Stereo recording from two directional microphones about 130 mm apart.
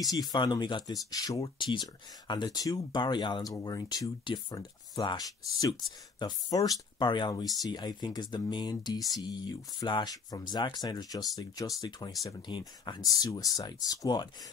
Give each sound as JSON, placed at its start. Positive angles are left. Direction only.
{"t": 0.0, "sound": "speech", "side_deg": 30}